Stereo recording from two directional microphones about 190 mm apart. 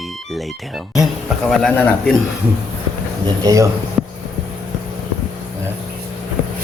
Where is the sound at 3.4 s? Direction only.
15° right (ahead or behind).